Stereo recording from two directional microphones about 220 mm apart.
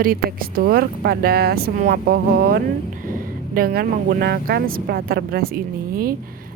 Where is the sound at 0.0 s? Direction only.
40° right (ahead or behind).